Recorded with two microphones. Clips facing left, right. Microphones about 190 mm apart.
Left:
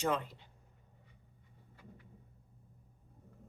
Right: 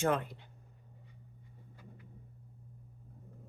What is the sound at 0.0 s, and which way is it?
Speech, 55° right (ahead or behind).